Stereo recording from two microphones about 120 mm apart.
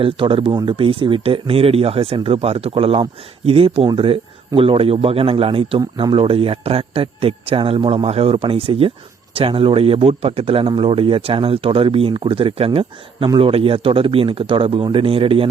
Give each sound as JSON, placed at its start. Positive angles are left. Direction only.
{"t": 0.0, "sound": "a man's voice", "side_deg": -45}